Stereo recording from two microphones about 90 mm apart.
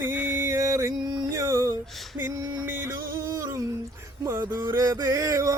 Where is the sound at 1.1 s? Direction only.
50° right (ahead or behind).